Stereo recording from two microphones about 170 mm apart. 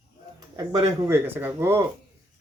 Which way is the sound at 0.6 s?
20° right (ahead or behind).